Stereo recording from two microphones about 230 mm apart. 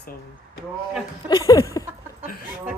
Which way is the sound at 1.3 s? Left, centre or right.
Centre.